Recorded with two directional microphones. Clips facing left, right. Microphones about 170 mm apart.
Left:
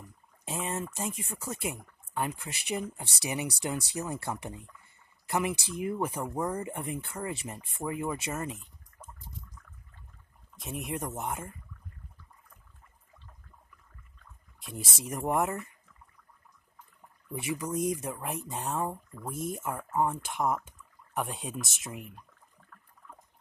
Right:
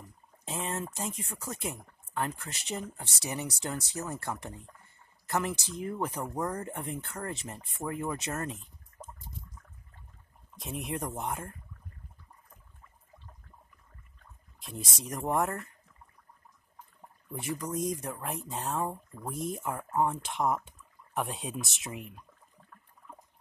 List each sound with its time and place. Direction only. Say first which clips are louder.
0.5 s speech: left 1 dB; 5° left (ahead or behind)
10.5 s speech: even; centre (ahead or behind)
14.7 s speech: left 1 dB; 5° left (ahead or behind)
17.7 s speech: left 3 dB; 60° left (ahead or behind)
18.0 s speech: left 1 dB; 5° left (ahead or behind)